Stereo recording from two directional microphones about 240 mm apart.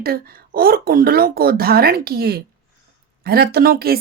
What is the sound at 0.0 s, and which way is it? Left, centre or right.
Speech, right.